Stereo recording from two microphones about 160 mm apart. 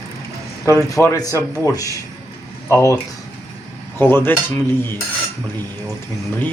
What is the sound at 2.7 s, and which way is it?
Speech, 20° left (ahead or behind).